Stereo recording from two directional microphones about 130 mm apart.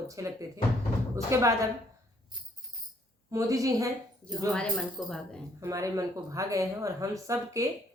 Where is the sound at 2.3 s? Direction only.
35° right (ahead or behind).